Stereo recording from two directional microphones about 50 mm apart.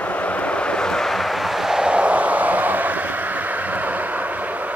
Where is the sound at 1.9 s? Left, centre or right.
Right.